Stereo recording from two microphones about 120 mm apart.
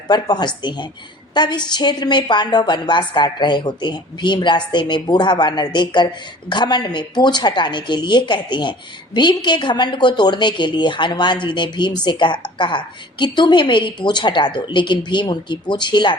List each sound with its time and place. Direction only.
0.1 s a woman's voice: 35° left (ahead or behind)